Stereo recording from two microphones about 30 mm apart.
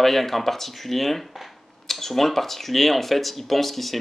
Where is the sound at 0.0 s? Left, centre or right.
Centre.